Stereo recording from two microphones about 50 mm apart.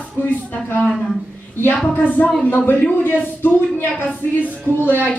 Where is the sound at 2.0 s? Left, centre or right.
Left.